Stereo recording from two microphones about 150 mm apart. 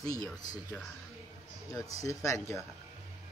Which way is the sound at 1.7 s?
20° left (ahead or behind).